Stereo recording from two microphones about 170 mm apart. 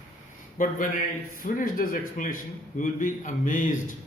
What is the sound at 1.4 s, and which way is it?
A man's voice, 55° left (ahead or behind).